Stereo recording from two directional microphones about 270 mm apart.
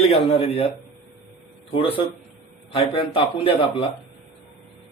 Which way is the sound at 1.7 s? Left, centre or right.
Centre.